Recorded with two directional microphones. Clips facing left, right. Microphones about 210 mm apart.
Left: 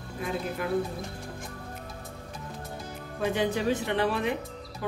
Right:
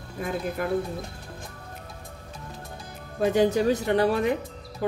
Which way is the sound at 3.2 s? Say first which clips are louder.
Right 6 dB; 40° right (ahead or behind).